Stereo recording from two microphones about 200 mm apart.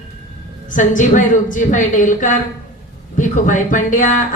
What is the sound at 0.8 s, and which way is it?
A woman's voice, 40° left (ahead or behind).